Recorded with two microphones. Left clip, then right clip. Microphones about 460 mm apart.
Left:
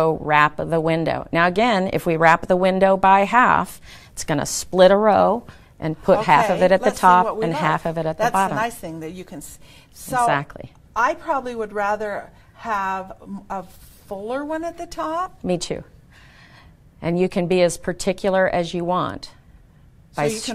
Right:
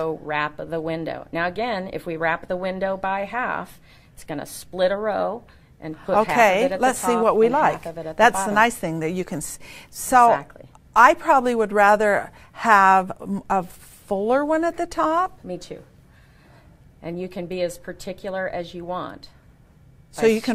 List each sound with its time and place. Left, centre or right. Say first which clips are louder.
0.0 s a woman's voice: left 8 dB; left
8.5 s a woman's voice: right 6 dB; right
10.2 s speech: right 3 dB; left
10.9 s a woman's voice: right 6 dB; right
12.5 s a woman's voice: right 9 dB; right
15.4 s a woman's voice: left 9 dB; left
17.0 s speech: left 10 dB; left